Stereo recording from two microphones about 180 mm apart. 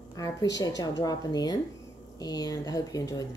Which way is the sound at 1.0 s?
20° left (ahead or behind).